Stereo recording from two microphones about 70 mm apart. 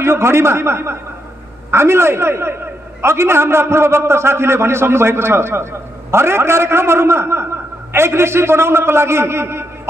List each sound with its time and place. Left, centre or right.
0.0 s a man's voice: right